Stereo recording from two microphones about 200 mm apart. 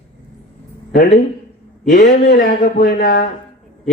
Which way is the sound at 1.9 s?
45° left (ahead or behind).